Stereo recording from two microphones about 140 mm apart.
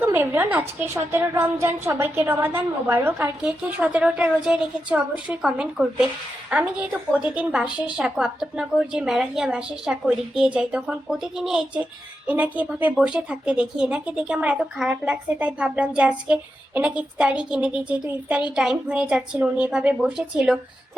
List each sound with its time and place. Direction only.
0.0 s a woman's voice: 15° right (ahead or behind)